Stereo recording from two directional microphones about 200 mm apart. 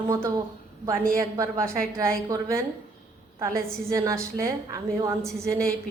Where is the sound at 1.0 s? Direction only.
45° right (ahead or behind).